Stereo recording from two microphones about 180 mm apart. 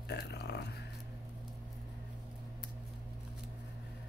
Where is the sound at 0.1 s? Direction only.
65° left (ahead or behind).